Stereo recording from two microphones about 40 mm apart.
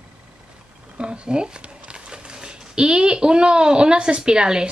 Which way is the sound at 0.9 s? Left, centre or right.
Right.